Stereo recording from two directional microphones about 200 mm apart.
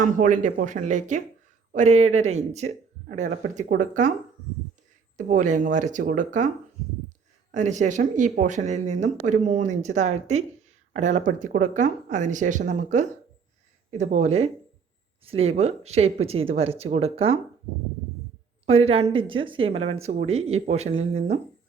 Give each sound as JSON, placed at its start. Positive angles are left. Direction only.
{"t": 0.0, "sound": "speech", "side_deg": -40}
{"t": 5.1, "sound": "speech", "side_deg": -40}
{"t": 7.5, "sound": "speech", "side_deg": -35}
{"t": 18.6, "sound": "speech", "side_deg": -30}